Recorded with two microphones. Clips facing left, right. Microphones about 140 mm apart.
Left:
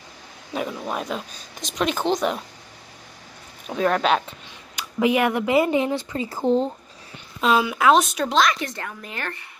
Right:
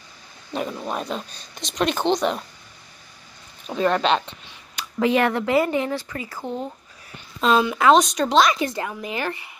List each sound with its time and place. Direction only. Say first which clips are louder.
0.5 s speech: even; 5° left (ahead or behind)
3.6 s speech: even; 5° left (ahead or behind); by 6.7 s 30° left (ahead or behind)
7.3 s speech: right 1 dB; 5° left (ahead or behind)
8.7 s a woman's voice: right 6 dB; 10° right (ahead or behind)